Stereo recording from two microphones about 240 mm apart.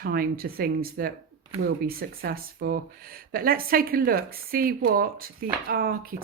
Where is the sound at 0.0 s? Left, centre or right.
Right.